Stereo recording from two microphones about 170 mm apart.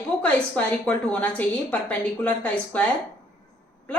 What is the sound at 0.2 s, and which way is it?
A woman's voice, 5° left (ahead or behind).